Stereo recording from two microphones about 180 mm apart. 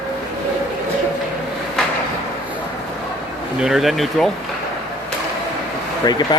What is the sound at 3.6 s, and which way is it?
Speech, centre (ahead or behind).